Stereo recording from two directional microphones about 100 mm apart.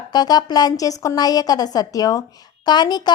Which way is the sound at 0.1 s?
40° left (ahead or behind).